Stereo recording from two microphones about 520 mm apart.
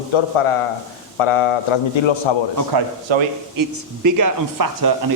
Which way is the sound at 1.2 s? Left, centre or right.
Left.